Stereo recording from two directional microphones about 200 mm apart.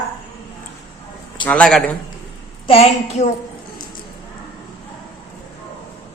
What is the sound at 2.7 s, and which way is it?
Speech, 30° left (ahead or behind).